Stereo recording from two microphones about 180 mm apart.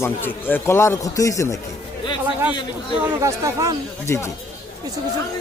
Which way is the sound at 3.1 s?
15° right (ahead or behind).